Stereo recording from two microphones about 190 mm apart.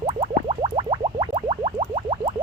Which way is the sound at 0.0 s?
35° right (ahead or behind).